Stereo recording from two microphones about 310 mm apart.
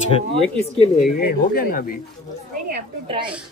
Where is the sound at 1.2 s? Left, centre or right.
Left.